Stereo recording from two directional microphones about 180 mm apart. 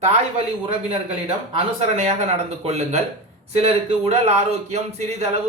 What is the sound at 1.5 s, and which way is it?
Speech, 35° right (ahead or behind).